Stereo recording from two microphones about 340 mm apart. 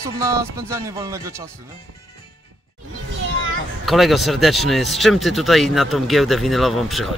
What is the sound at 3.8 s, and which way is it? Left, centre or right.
Speech, centre.